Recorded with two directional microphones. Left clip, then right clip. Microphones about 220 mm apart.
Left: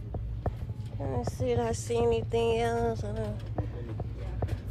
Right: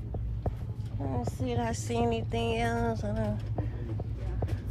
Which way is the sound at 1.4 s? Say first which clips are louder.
Left 5 dB; 25° left (ahead or behind).